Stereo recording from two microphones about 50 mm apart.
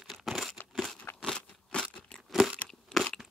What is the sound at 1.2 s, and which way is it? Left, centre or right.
Crunch, centre.